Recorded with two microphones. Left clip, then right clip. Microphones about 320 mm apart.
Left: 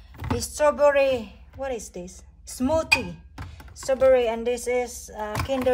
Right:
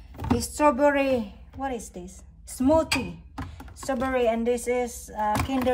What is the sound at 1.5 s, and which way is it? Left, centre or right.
A woman's voice, left.